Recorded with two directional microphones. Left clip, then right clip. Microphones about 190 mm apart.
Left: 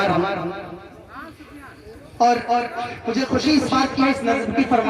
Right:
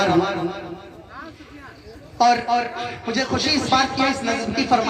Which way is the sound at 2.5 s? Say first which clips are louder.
Even; 15° right (ahead or behind).